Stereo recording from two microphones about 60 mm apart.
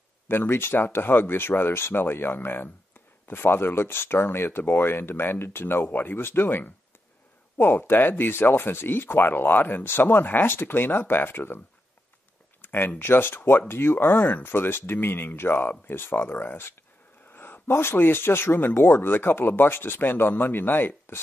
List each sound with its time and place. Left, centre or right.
0.3 s speech: left
12.6 s speech: left